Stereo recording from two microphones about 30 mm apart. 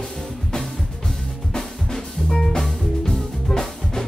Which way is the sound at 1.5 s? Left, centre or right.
Centre.